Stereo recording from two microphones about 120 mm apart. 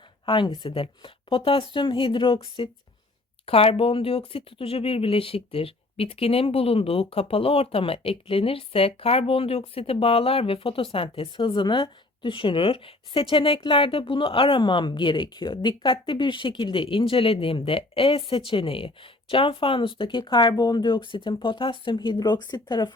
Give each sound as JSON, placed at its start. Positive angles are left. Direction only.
{"t": 0.3, "sound": "speech", "side_deg": 40}